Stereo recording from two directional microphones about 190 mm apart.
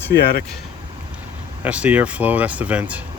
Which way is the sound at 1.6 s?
5° right (ahead or behind).